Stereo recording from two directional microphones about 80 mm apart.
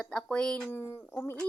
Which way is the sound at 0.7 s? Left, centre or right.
Left.